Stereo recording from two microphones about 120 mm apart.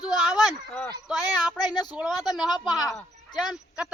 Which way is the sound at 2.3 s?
Centre (ahead or behind).